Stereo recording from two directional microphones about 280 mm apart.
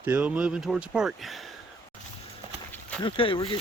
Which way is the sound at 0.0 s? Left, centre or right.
Centre.